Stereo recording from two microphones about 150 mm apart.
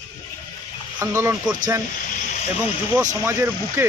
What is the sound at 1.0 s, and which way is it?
Speech, 20° right (ahead or behind).